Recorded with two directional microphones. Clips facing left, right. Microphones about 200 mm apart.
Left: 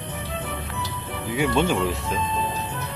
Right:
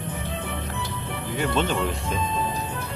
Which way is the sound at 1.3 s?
10° left (ahead or behind).